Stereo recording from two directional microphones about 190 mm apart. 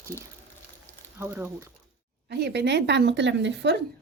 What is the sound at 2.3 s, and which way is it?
Speech, 60° right (ahead or behind).